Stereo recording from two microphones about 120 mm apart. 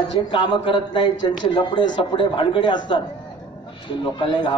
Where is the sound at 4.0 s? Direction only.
40° left (ahead or behind).